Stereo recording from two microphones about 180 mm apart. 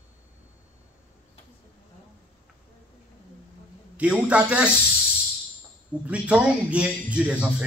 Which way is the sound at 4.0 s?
5° right (ahead or behind).